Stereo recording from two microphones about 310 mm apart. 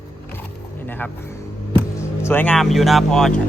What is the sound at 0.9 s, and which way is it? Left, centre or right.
Speech, centre.